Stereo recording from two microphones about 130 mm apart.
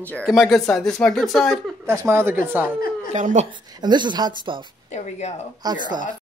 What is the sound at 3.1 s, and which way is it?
Speech, 65° right (ahead or behind).